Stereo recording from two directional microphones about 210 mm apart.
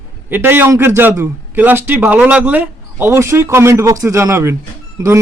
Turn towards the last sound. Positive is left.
turn(degrees=-15)  # may be behind; listen again after turning